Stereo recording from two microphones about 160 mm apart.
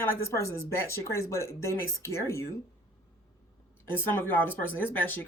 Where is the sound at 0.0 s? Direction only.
15° left (ahead or behind).